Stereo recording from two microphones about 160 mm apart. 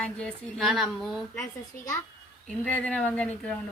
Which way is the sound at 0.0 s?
5° left (ahead or behind).